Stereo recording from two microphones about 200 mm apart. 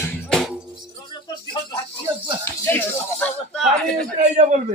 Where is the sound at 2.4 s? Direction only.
10° left (ahead or behind).